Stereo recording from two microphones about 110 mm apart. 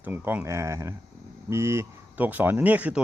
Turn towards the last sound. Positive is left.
turn(degrees=-10)  # may be behind; listen again after turning